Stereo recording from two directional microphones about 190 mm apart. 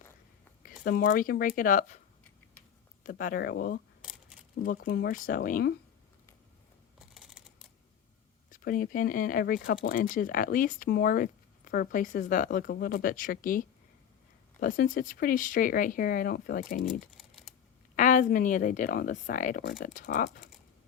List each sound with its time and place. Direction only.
0.6 s speech: 50° left (ahead or behind)
3.0 s speech: 50° left (ahead or behind)
7.1 s computer keyboard: 5° right (ahead or behind)
8.4 s speech: 45° left (ahead or behind)
16.8 s typing: 5° right (ahead or behind)
17.9 s speech: 45° left (ahead or behind)